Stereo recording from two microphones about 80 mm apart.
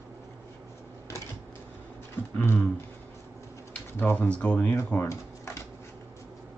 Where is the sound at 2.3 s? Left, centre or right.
Left.